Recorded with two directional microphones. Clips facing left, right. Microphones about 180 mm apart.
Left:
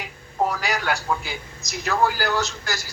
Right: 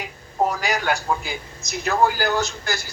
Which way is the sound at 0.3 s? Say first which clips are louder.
Right 2 dB; 20° right (ahead or behind).